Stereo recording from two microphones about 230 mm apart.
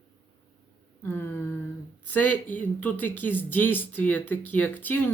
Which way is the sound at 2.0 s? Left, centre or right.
Centre.